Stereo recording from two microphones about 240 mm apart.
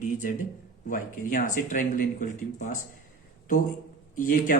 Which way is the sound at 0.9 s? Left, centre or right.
Left.